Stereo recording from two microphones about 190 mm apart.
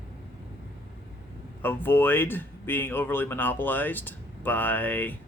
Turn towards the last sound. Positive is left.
turn(degrees=10)  # may be behind; listen again after turning